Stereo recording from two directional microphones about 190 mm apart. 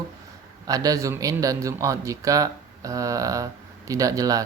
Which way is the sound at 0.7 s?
20° right (ahead or behind).